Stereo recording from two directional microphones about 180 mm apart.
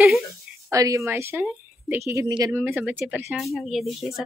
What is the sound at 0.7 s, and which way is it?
A woman's voice, 15° right (ahead or behind).